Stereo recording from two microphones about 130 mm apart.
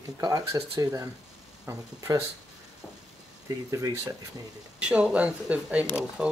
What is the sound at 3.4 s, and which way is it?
Speech, 25° right (ahead or behind).